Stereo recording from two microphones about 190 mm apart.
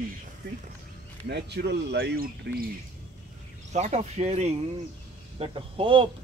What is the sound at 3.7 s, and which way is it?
Speech, 35° right (ahead or behind).